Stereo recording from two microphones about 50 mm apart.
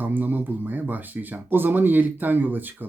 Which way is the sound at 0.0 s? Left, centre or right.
Right.